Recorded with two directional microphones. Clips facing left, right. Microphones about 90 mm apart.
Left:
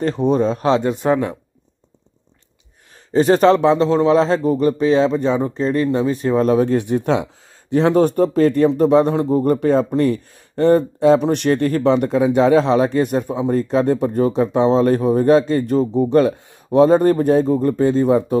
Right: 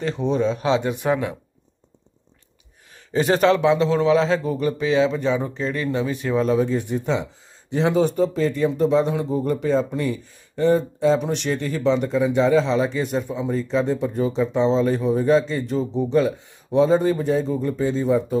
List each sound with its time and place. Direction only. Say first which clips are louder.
0.0 s a man's voice: left 5 dB; 45° left (ahead or behind)
3.1 s a man's voice: left 5 dB; 35° left (ahead or behind); by 7.2 s 65° left (ahead or behind)
7.7 s speech: left 5 dB; 55° left (ahead or behind)